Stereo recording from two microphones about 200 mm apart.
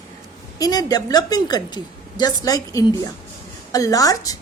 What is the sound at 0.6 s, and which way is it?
A woman's voice, 20° left (ahead or behind).